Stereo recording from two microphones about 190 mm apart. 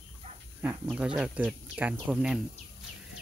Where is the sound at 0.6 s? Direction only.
5° right (ahead or behind).